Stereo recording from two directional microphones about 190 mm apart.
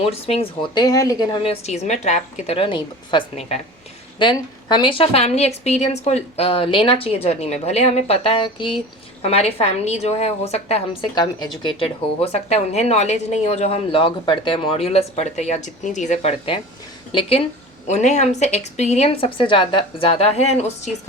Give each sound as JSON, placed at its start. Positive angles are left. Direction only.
{"t": 0.0, "sound": "a woman's voice", "side_deg": 30}